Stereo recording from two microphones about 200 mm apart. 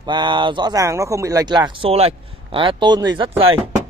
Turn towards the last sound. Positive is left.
turn(degrees=-25)  # may be behind; listen again after turning